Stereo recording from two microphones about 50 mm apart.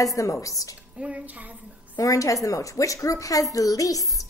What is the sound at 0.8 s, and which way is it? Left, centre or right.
Speech, right.